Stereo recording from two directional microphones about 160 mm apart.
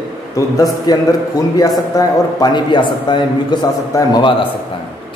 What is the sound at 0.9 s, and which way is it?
A man's voice, 25° left (ahead or behind).